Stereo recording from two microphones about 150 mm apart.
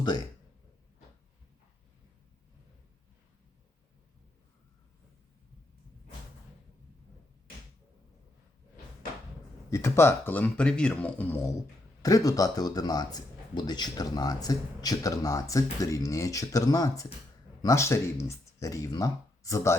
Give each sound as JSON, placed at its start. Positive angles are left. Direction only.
{"t": 9.6, "sound": "a man's voice", "side_deg": 20}
{"t": 12.0, "sound": "speech", "side_deg": 25}